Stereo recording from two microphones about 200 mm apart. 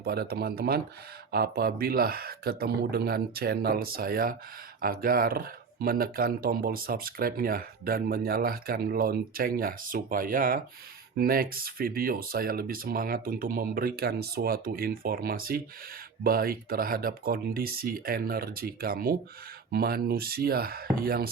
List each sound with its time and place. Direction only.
0.0 s speech: 50° right (ahead or behind)